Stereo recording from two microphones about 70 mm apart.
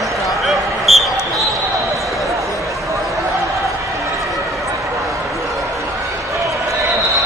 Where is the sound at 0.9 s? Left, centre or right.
Centre.